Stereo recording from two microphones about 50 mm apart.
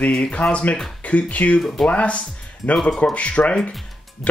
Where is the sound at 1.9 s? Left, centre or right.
Left.